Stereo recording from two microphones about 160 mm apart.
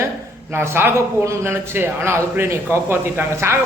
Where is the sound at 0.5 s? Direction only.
15° right (ahead or behind).